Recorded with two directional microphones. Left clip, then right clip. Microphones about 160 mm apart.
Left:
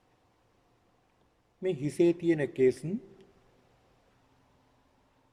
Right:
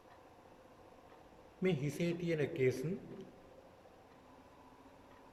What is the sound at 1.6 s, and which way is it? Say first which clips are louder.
Speech: left 10 dB; 55° left (ahead or behind).